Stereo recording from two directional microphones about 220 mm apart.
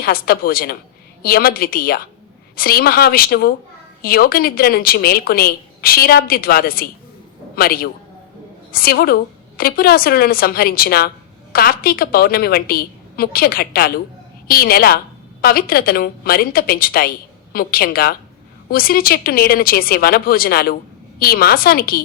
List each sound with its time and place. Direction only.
0.0 s a woman's voice: 40° left (ahead or behind)